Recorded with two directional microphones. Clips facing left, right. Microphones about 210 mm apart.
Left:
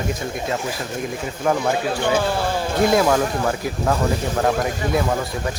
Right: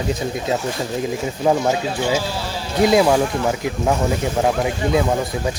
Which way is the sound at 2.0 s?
55° left (ahead or behind).